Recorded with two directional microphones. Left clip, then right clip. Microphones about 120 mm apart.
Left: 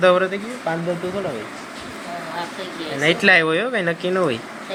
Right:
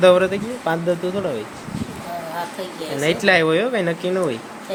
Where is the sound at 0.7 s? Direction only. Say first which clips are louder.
Right 2 dB; 40° right (ahead or behind).